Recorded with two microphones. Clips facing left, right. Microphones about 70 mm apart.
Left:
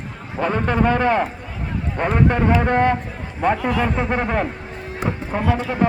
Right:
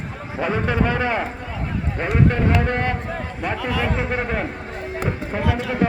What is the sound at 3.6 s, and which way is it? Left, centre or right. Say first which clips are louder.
Speech: left 3 dB; left.